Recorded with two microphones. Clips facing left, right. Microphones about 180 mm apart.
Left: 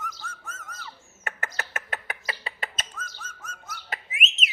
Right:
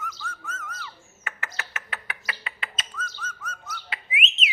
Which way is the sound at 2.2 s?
40° left (ahead or behind).